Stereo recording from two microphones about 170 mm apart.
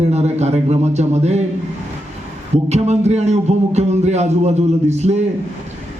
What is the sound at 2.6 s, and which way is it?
A man's voice, 40° right (ahead or behind).